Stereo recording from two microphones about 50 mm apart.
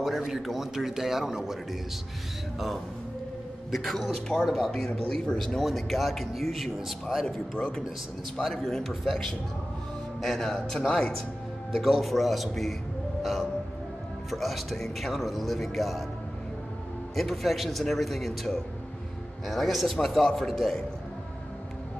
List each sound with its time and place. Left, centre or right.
0.3 s a man's voice: centre
3.7 s a man's voice: centre
5.6 s a man's voice: centre
7.2 s speech: centre
8.4 s a man's voice: centre
13.2 s whale vocalization: centre
14.3 s a man's voice: centre
17.1 s a man's voice: centre